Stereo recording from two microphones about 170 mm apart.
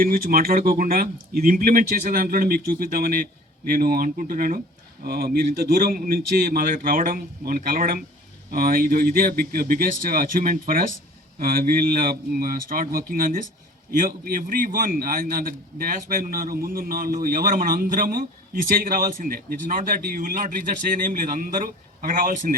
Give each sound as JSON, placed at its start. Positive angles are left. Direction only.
{"t": 0.0, "sound": "a man's voice", "side_deg": -55}